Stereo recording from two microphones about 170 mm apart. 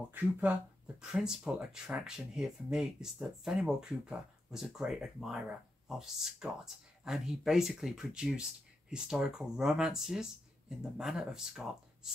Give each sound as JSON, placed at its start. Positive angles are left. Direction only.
{"t": 0.1, "sound": "speech", "side_deg": -10}